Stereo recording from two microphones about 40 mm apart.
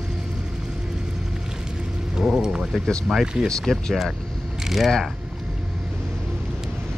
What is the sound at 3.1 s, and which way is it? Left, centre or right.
Speech, centre.